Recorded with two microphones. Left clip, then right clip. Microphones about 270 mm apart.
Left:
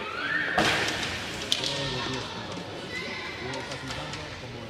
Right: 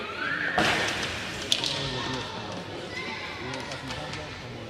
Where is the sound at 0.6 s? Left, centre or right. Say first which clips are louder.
Even; centre.